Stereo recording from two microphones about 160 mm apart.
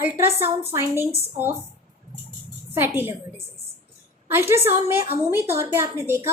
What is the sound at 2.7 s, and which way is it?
Speech, 15° right (ahead or behind).